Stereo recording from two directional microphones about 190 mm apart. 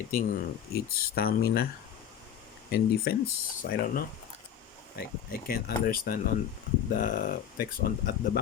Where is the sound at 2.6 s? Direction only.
55° left (ahead or behind).